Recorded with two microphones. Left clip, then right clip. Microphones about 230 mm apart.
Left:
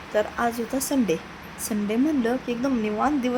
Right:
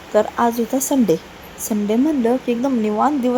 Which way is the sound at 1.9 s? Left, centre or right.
Right.